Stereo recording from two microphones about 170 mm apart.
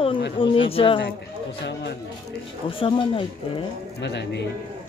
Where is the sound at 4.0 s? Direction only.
85° left.